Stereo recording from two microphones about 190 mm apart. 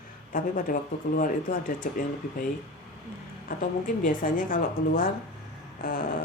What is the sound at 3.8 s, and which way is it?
Speech, 45° left (ahead or behind).